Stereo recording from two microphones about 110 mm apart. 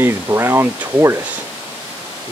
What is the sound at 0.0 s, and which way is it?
Speech, 20° right (ahead or behind).